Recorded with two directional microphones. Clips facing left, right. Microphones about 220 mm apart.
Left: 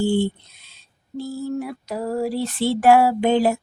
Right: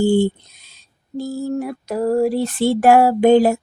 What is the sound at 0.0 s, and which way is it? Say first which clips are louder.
Speech: right 5 dB; 45° right (ahead or behind).